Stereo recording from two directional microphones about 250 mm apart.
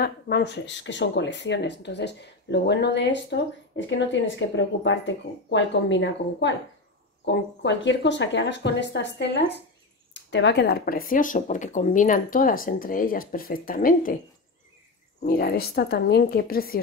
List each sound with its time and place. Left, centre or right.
0.0 s speech: left
15.2 s speech: left